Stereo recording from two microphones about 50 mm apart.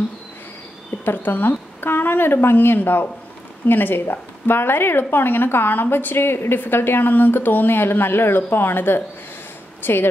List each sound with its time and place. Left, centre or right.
1.0 s speech: left